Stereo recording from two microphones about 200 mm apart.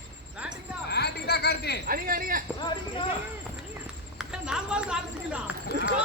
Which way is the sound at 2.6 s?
20° left (ahead or behind).